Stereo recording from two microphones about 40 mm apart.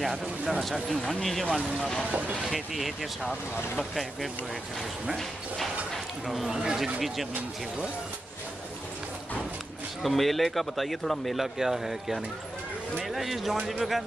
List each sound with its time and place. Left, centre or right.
0.2 s speech: centre
0.8 s speech: centre
2.0 s speech: right
2.5 s speech: centre
6.2 s speech: centre
10.0 s speech: centre
11.3 s speech: centre